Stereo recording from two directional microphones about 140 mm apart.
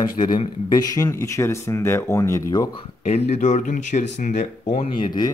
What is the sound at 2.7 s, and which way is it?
Speech, 50° left (ahead or behind).